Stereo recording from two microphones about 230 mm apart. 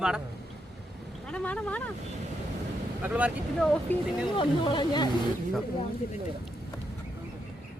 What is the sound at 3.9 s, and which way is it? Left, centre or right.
Speech, centre.